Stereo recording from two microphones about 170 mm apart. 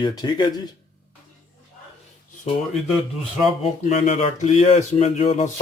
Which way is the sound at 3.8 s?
40° left (ahead or behind).